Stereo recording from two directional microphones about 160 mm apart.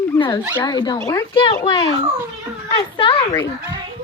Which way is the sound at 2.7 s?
35° left (ahead or behind).